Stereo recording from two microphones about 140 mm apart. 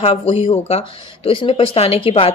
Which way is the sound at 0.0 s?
40° left (ahead or behind).